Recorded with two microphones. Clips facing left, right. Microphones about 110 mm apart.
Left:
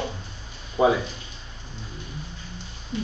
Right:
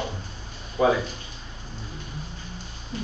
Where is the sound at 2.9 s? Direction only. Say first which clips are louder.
Left 3 dB; 40° right (ahead or behind).